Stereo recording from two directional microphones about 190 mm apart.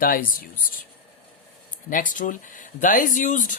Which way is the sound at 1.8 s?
45° left (ahead or behind).